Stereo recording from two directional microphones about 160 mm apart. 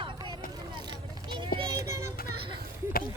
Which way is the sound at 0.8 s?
30° right (ahead or behind).